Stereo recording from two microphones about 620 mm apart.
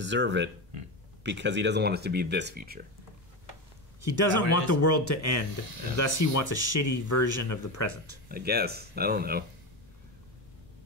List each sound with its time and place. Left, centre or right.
0.0 s speech: centre
4.3 s speech: left
8.3 s speech: centre